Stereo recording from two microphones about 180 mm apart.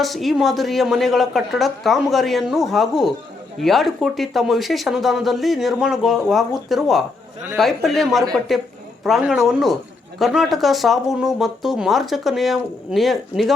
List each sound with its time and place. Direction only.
0.0 s speech: centre (ahead or behind)